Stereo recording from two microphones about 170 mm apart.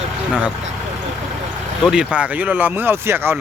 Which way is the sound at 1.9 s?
5° right (ahead or behind).